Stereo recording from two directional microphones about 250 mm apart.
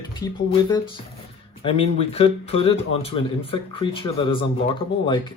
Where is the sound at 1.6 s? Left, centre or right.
Left.